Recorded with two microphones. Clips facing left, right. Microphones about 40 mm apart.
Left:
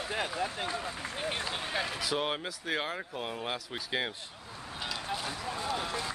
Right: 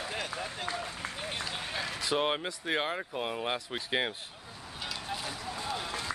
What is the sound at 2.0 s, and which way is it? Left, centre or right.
Speech, centre.